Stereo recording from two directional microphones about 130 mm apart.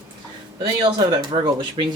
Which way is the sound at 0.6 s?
35° right (ahead or behind).